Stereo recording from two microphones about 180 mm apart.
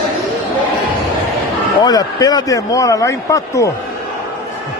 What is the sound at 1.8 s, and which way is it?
A man's voice, 20° left (ahead or behind).